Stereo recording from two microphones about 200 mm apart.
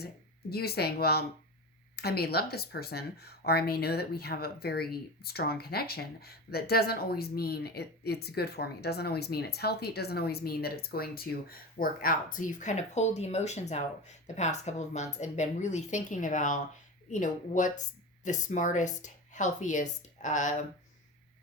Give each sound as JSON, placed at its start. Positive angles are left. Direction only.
{"t": 0.5, "sound": "a woman's voice", "side_deg": 50}